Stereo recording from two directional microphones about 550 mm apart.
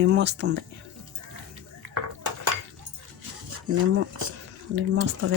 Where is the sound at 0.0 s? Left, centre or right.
Centre.